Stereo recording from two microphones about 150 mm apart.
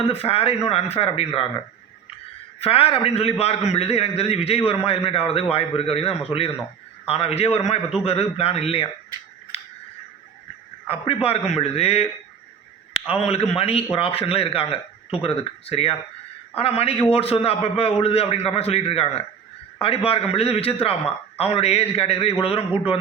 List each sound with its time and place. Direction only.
0.0 s a man's voice: 40° left (ahead or behind)
2.6 s a man's voice: 40° left (ahead or behind)
9.5 s scissors: 40° left (ahead or behind)
10.8 s a man's voice: 40° left (ahead or behind)